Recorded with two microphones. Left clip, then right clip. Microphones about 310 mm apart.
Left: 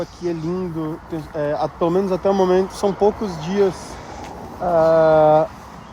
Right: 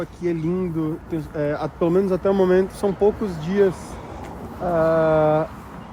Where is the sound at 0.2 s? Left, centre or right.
Centre.